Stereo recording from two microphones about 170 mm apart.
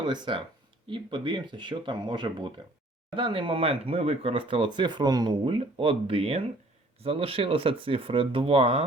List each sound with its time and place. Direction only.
0.0 s speech: 25° right (ahead or behind)